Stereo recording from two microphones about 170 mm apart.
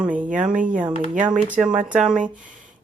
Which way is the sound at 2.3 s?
50° right (ahead or behind).